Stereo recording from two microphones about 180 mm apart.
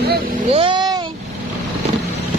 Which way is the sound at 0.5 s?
25° right (ahead or behind).